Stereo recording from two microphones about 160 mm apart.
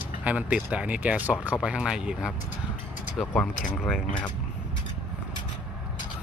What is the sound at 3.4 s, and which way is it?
Speech, 5° left (ahead or behind).